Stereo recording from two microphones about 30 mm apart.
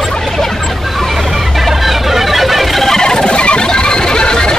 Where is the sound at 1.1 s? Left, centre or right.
Centre.